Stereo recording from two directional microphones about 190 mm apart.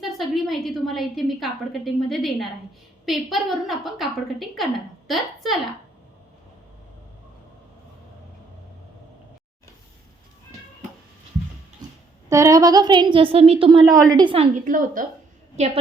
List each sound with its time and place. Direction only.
0.0 s a woman's voice: centre (ahead or behind)
11.8 s a sound: 20° right (ahead or behind)
12.3 s a woman's voice: 15° right (ahead or behind)
14.6 s a woman's voice: 45° right (ahead or behind)
15.5 s a woman's voice: 35° right (ahead or behind)